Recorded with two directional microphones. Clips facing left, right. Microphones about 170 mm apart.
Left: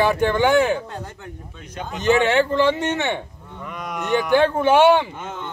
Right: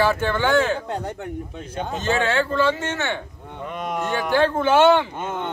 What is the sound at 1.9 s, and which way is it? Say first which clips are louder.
Speech: left 5 dB; 20° left (ahead or behind).